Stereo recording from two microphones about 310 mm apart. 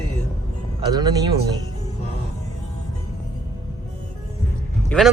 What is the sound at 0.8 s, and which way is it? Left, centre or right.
Speech, centre.